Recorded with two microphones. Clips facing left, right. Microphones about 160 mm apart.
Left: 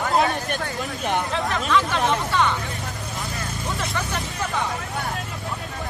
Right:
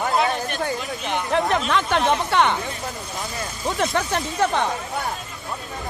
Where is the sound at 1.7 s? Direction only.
60° right (ahead or behind).